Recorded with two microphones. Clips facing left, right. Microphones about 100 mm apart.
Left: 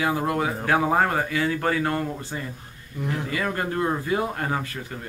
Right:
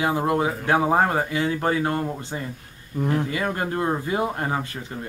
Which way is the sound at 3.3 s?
25° right (ahead or behind).